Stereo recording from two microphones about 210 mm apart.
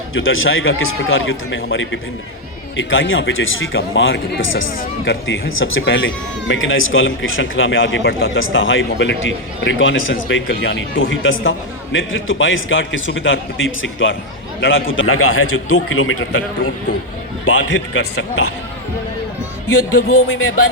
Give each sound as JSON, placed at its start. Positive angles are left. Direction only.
{"t": 0.1, "sound": "a man's voice", "side_deg": 75}
{"t": 17.9, "sound": "music", "side_deg": 90}
{"t": 19.7, "sound": "music", "side_deg": 90}